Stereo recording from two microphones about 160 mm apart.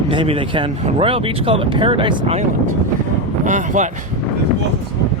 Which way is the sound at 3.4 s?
50° right (ahead or behind).